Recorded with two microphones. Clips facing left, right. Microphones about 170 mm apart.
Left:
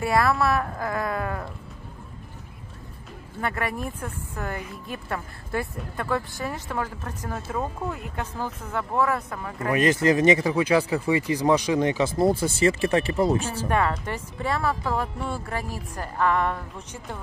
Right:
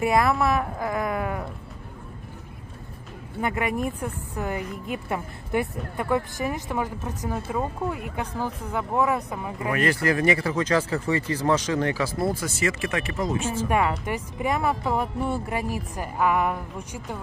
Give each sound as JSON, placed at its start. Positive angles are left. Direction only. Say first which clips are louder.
{"t": 0.0, "sound": "speech", "louder": "right 1 dB", "side_deg": -20}
{"t": 3.3, "sound": "speech", "louder": "right 3 dB", "side_deg": -15}
{"t": 9.7, "sound": "speech", "louder": "left 3 dB", "side_deg": 20}
{"t": 13.7, "sound": "speech", "louder": "even", "side_deg": -10}